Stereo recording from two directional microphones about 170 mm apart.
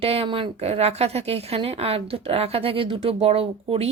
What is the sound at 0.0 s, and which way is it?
A woman's voice, 35° right (ahead or behind).